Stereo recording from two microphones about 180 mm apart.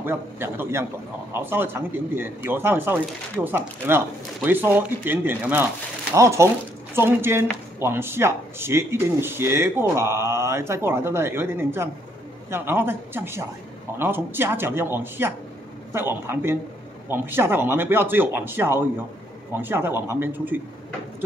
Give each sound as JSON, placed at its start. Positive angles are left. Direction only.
{"t": 0.0, "sound": "speech", "side_deg": -15}